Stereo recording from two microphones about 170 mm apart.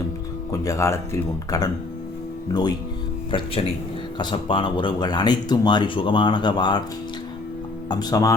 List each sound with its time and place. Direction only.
0.5 s speech: 20° left (ahead or behind)
4.2 s speech: 30° left (ahead or behind)
7.9 s speech: 20° left (ahead or behind)